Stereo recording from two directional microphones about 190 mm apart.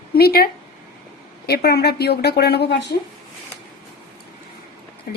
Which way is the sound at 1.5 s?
55° left (ahead or behind).